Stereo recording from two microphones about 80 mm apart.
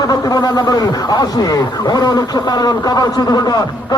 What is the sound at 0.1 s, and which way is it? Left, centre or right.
Speech, left.